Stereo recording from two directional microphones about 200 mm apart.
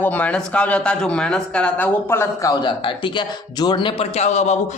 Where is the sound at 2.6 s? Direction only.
25° left (ahead or behind).